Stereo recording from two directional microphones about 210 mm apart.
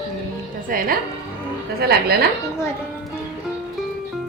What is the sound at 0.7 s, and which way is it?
A woman's voice, 40° right (ahead or behind).